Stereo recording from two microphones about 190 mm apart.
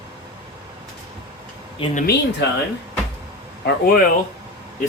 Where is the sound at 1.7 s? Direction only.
30° left (ahead or behind).